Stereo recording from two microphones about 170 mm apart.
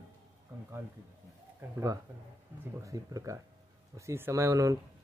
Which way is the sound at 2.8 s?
20° right (ahead or behind).